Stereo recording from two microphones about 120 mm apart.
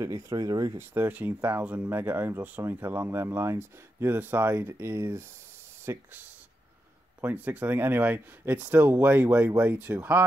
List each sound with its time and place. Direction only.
0.0 s speech: 25° right (ahead or behind)
0.9 s speech: 15° right (ahead or behind)
7.2 s speech: 15° right (ahead or behind)